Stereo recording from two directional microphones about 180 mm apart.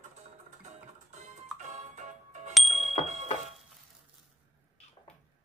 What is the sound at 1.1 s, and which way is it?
Music, 40° right (ahead or behind).